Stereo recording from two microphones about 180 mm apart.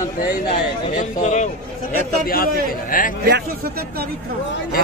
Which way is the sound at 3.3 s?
65° right (ahead or behind).